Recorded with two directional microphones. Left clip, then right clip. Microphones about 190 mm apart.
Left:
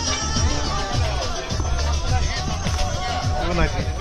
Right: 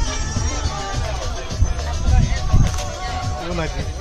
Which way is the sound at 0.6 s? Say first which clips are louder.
Left 1 dB; 35° left (ahead or behind).